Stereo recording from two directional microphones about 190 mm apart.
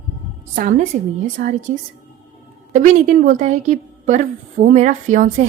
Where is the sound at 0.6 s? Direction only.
40° right (ahead or behind).